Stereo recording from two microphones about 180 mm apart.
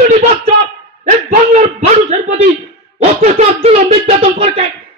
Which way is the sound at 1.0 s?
40° right (ahead or behind).